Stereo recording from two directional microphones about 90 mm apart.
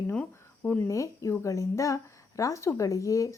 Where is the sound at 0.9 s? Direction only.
35° left (ahead or behind).